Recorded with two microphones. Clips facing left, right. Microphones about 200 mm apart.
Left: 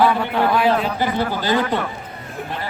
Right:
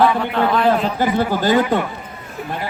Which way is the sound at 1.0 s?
45° right (ahead or behind).